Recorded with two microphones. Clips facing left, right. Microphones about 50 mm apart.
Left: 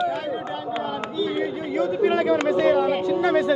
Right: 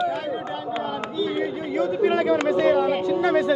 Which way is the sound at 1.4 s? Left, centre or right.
Left.